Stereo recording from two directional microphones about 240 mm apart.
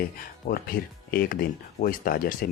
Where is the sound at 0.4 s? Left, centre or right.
Left.